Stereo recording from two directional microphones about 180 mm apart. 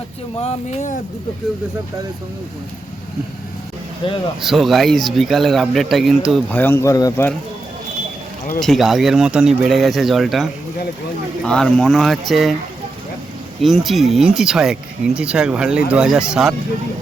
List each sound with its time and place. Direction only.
0.4 s speech: 40° left (ahead or behind)
4.0 s speech: 30° left (ahead or behind)
4.4 s speech: centre (ahead or behind); by 7.3 s 20° left (ahead or behind)
8.6 s speech: centre (ahead or behind)
13.8 s speech: centre (ahead or behind)